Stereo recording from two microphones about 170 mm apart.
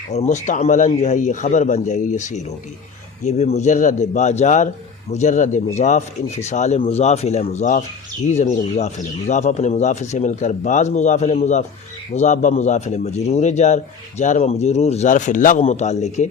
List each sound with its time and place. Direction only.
0.1 s speech: 45° left (ahead or behind)